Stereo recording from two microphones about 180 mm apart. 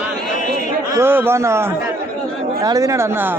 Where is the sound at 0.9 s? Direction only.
10° right (ahead or behind).